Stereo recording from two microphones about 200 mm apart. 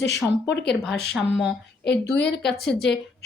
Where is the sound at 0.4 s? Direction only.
60° left (ahead or behind).